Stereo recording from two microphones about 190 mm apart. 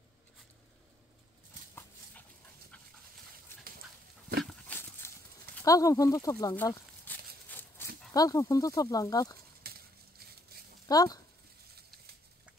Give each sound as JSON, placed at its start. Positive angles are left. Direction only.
{"t": 4.5, "sound": "dog", "side_deg": 5}
{"t": 5.6, "sound": "speech", "side_deg": 15}
{"t": 9.6, "sound": "a sound", "side_deg": -55}
{"t": 10.9, "sound": "speech", "side_deg": 20}